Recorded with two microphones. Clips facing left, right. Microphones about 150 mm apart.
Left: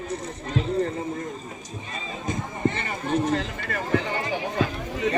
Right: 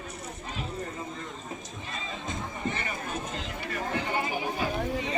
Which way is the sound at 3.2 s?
90° left.